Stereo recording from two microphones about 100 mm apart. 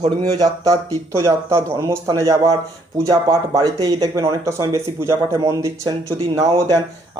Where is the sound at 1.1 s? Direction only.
30° right (ahead or behind).